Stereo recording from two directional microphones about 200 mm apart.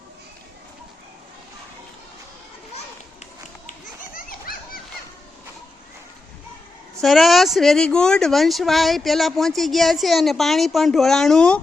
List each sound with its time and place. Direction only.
3.7 s children playing: 45° left (ahead or behind)
7.0 s speech: centre (ahead or behind)